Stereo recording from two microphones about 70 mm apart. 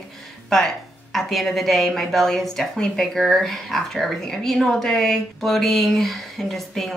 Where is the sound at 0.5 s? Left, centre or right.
Centre.